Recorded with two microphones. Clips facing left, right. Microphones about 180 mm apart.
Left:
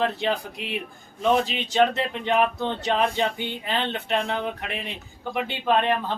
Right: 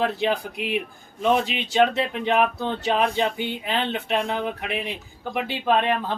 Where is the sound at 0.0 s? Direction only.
5° right (ahead or behind).